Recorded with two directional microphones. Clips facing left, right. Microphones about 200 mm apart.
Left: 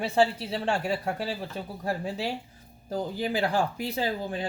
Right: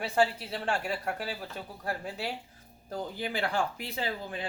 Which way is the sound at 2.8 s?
40° left (ahead or behind).